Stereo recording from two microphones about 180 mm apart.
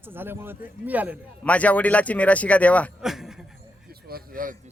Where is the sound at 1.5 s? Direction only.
10° left (ahead or behind).